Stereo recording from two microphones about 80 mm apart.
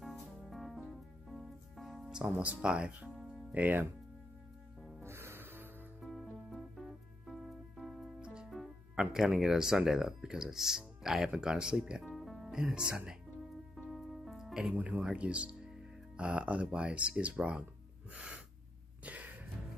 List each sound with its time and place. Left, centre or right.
0.0 s music: centre
3.5 s speech: centre
5.0 s music: right
5.9 s music: centre
8.2 s music: centre
9.1 s speech: centre
12.2 s music: centre
12.9 s speech: centre
13.7 s music: centre
15.0 s speech: centre
18.1 s gasp: centre